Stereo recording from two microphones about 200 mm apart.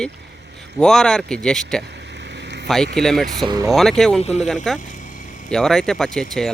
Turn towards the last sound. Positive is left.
turn(degrees=0)  # may be behind; listen again after turning